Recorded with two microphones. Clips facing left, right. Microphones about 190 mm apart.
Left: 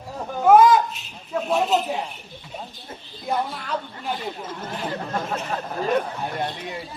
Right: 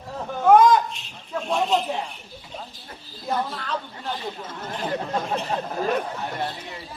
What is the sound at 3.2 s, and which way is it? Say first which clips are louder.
Speech: left 1 dB; 10° left (ahead or behind).